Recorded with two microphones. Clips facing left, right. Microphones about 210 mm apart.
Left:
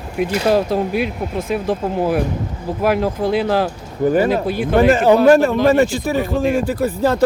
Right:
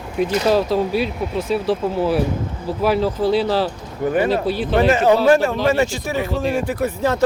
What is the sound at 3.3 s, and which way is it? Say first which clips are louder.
Speech: left 1 dB; 55° left (ahead or behind).